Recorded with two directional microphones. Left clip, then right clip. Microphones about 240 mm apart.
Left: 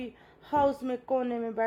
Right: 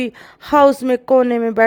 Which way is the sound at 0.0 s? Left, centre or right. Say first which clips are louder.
Right 17 dB; right.